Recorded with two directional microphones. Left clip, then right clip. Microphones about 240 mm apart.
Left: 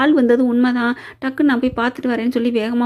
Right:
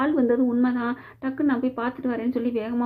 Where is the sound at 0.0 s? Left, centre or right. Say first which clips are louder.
Left 8 dB; left.